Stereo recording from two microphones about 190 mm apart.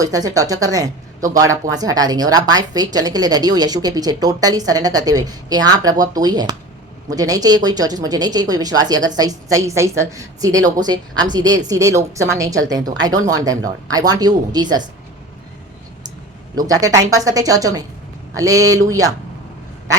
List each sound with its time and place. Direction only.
0.0 s speech: 20° right (ahead or behind)
16.6 s speech: 20° right (ahead or behind)